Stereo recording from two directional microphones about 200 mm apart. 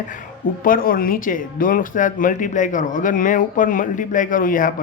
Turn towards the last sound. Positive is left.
turn(degrees=45)  # may be behind; listen again after turning